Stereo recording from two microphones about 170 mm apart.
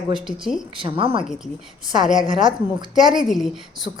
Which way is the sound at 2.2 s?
30° right (ahead or behind).